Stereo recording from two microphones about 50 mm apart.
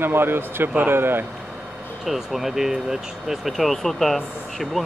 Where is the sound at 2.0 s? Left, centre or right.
Centre.